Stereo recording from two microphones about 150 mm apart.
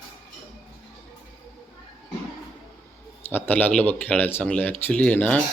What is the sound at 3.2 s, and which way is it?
Speech, 15° left (ahead or behind).